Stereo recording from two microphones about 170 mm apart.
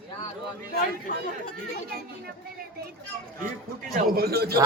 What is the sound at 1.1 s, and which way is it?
Speech, 55° left (ahead or behind).